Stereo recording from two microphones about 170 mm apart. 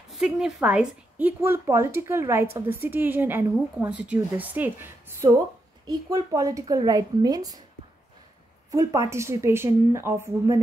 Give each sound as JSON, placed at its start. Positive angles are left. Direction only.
{"t": 0.1, "sound": "a woman's voice", "side_deg": -5}
{"t": 8.7, "sound": "a woman's voice", "side_deg": -20}